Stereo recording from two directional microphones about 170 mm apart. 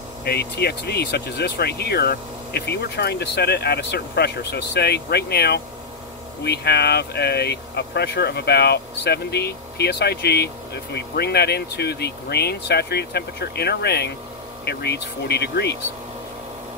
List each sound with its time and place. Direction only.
0.2 s speech: 65° left (ahead or behind)